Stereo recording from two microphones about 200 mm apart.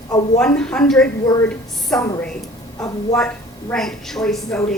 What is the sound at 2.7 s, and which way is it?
Speech, 15° left (ahead or behind).